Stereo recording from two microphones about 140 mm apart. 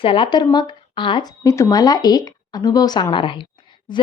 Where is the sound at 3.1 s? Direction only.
35° left (ahead or behind).